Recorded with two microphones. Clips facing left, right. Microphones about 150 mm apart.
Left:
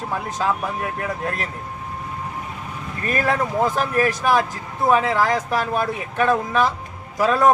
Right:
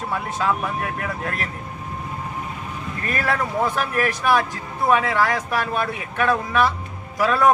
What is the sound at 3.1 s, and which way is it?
Speech, 20° left (ahead or behind).